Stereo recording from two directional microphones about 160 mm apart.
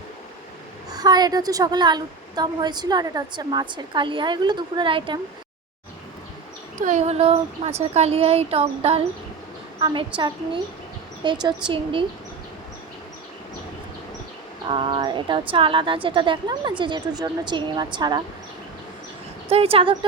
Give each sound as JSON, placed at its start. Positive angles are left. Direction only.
{"t": 0.9, "sound": "a woman's voice", "side_deg": -25}
{"t": 6.7, "sound": "a woman's voice", "side_deg": -50}
{"t": 14.7, "sound": "a woman's voice", "side_deg": -30}
{"t": 19.5, "sound": "a woman's voice", "side_deg": -35}